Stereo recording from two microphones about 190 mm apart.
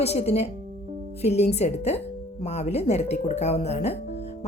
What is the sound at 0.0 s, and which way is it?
Speech, 35° left (ahead or behind).